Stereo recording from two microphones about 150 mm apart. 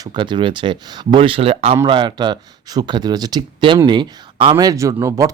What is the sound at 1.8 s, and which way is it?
Speech, 30° right (ahead or behind).